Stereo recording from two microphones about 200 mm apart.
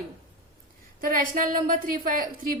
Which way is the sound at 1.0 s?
45° right (ahead or behind).